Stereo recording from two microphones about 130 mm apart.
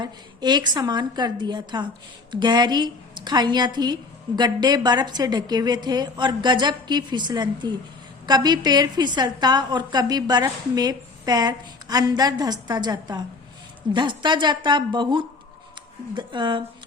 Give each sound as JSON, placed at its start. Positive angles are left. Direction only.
{"t": 0.0, "sound": "a woman's voice", "side_deg": -35}